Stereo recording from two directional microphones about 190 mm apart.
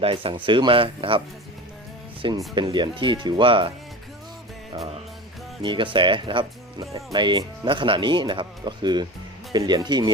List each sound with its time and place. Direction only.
0.0 s speech: 30° right (ahead or behind)
2.2 s speech: 25° right (ahead or behind)
5.6 s speech: 25° right (ahead or behind)